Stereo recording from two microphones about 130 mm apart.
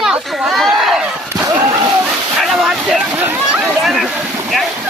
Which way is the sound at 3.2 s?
15° right (ahead or behind).